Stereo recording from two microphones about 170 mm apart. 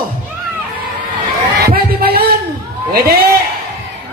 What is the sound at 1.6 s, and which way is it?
A man's voice, 65° right (ahead or behind).